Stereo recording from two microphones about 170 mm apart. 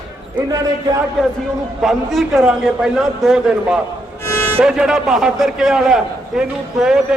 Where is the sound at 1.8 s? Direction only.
Centre (ahead or behind).